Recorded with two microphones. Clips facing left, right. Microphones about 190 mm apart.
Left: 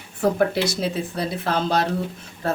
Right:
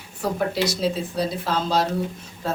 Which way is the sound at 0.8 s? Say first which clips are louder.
Right 2 dB; 55° left (ahead or behind).